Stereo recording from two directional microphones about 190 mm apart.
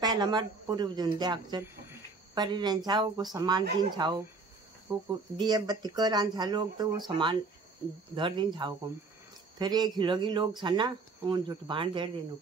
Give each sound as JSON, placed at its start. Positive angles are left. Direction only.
{"t": 0.0, "sound": "speech", "side_deg": -20}
{"t": 9.6, "sound": "speech", "side_deg": -20}